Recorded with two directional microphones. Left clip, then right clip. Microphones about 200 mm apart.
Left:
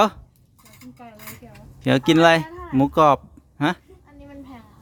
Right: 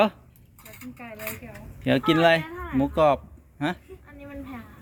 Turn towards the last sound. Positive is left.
turn(degrees=50)  # may be behind; listen again after turning